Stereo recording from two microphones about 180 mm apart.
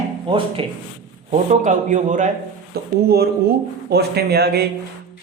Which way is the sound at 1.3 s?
45° right (ahead or behind).